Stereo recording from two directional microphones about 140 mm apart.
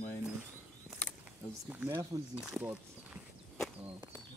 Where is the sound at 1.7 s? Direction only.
10° right (ahead or behind).